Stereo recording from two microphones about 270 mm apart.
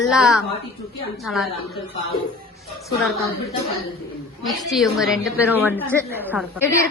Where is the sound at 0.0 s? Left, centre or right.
Centre.